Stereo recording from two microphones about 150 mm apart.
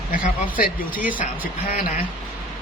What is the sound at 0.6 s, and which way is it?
Speech, 70° left (ahead or behind).